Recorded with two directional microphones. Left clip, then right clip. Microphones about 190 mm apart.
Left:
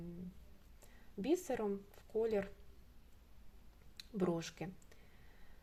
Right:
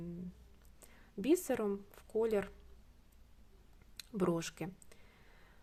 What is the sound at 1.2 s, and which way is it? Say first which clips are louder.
Speech: right 4 dB; 20° right (ahead or behind).